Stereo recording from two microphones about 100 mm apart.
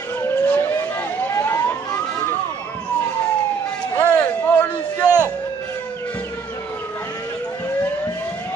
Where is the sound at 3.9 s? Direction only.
15° left (ahead or behind).